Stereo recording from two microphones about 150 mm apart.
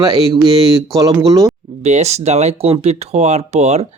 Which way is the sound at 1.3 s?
20° right (ahead or behind).